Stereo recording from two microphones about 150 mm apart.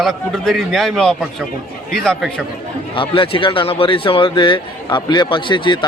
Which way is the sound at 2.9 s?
35° left (ahead or behind).